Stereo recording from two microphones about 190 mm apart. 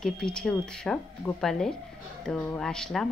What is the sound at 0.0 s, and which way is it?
Speech, 5° left (ahead or behind).